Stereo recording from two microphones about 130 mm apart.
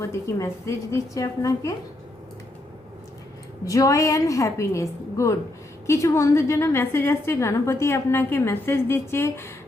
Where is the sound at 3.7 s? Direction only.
25° left (ahead or behind).